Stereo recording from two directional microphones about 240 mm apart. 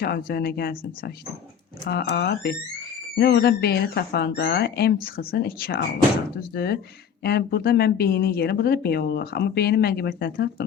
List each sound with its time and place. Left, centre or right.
0.0 s speech: left